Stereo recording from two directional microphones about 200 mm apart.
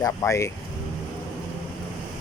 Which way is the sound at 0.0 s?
15° left (ahead or behind).